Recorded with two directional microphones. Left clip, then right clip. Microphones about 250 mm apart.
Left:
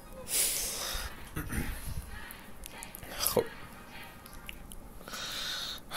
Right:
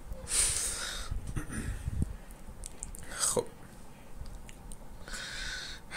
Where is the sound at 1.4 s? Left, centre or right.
Left.